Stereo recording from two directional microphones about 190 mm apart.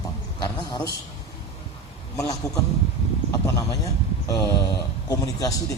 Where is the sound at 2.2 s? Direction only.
15° left (ahead or behind).